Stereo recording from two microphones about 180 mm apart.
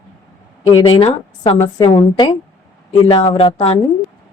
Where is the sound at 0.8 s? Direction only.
35° left (ahead or behind).